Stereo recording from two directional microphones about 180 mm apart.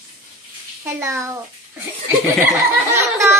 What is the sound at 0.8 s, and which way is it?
Speech, 15° right (ahead or behind).